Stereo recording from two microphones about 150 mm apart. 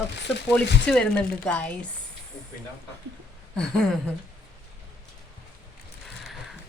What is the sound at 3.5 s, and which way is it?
Speech, 5° left (ahead or behind).